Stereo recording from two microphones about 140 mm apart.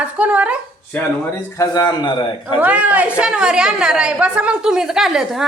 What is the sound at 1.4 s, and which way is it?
A man's voice, 25° left (ahead or behind).